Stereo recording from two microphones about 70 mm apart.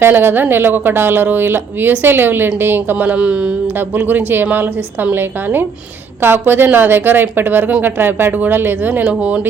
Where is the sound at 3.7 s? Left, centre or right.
Right.